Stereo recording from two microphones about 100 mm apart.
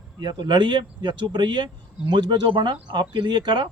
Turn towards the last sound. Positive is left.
turn(degrees=-50)  # may be behind; listen again after turning